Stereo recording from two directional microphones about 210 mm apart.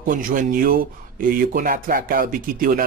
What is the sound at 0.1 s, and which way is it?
Speech, 40° right (ahead or behind).